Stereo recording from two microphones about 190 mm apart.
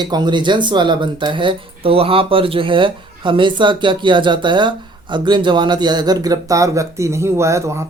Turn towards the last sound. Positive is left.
turn(degrees=-15)  # may be behind; listen again after turning